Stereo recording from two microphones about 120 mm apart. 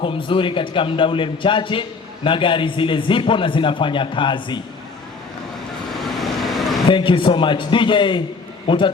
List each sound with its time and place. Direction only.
0.0 s a man's voice: 45° left (ahead or behind)
5.9 s vehicle: centre (ahead or behind)
6.8 s a man's voice: 45° left (ahead or behind)